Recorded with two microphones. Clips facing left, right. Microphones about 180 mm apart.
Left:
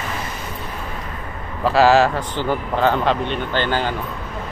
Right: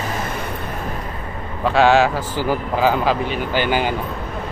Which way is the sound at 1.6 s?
Centre (ahead or behind).